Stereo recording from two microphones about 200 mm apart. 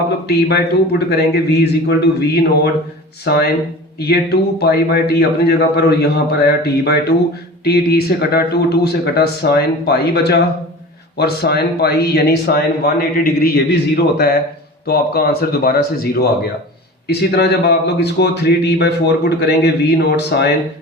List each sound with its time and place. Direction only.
0.3 s speech: 55° left (ahead or behind)